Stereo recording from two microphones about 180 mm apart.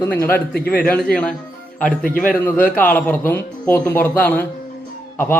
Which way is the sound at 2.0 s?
50° left (ahead or behind).